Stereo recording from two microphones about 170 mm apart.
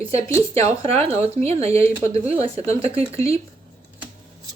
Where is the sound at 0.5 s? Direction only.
35° right (ahead or behind).